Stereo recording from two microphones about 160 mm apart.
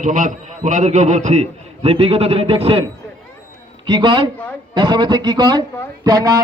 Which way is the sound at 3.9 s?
30° right (ahead or behind).